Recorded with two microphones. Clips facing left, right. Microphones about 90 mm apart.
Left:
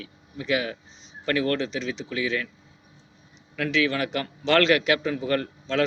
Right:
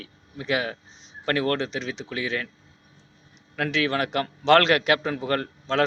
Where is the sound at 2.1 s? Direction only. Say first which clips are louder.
Left 2 dB; 40° right (ahead or behind).